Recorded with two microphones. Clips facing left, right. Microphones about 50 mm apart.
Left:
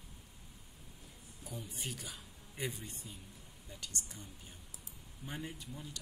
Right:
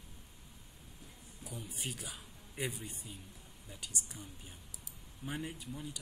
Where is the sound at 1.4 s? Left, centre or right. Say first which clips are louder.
Right 1 dB; centre.